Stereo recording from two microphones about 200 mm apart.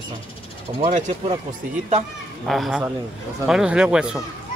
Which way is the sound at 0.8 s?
35° right (ahead or behind).